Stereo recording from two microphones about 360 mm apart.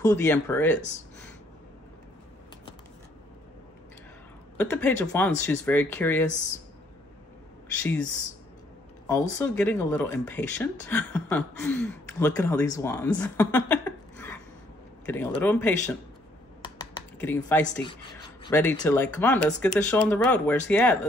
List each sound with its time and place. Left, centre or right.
0.0 s speech: centre
4.6 s speech: centre
7.8 s speech: left
9.4 s speech: centre
17.2 s speech: centre